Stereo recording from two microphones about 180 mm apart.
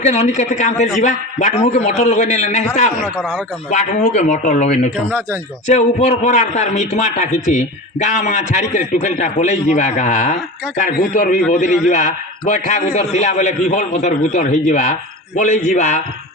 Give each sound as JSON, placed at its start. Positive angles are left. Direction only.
{"t": 0.0, "sound": "a man's voice", "side_deg": 40}
{"t": 3.0, "sound": "speech", "side_deg": 0}
{"t": 3.7, "sound": "a man's voice", "side_deg": 40}